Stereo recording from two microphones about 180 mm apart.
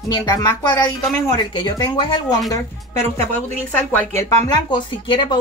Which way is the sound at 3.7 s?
10° left (ahead or behind).